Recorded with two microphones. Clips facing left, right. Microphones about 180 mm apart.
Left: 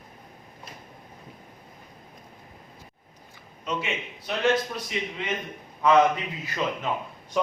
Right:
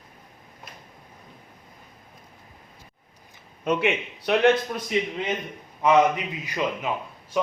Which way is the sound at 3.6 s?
60° right (ahead or behind).